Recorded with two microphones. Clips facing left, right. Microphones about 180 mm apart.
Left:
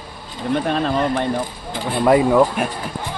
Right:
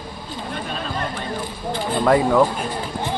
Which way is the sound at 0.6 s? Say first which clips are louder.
Left 8 dB; 60° left (ahead or behind).